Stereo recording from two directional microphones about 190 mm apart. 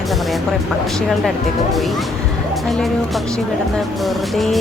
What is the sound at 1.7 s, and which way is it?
Music, centre (ahead or behind).